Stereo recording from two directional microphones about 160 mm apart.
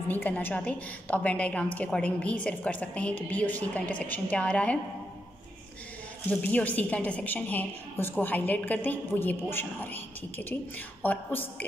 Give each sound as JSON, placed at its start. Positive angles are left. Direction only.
{"t": 0.1, "sound": "a woman's voice", "side_deg": 10}
{"t": 6.4, "sound": "a woman's voice", "side_deg": 10}